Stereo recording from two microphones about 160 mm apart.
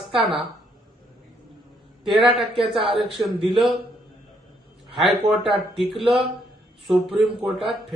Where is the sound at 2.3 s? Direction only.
35° right (ahead or behind).